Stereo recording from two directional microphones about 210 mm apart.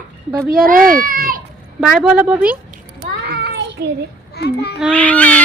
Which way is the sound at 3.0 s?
50° right (ahead or behind).